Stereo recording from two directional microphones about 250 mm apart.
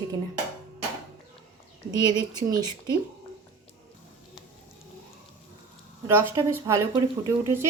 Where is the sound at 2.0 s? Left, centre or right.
Centre.